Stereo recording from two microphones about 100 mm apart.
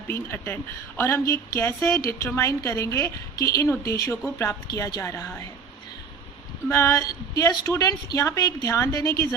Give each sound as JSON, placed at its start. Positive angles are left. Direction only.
{"t": 0.1, "sound": "a woman's voice", "side_deg": 20}
{"t": 6.7, "sound": "a woman's voice", "side_deg": 30}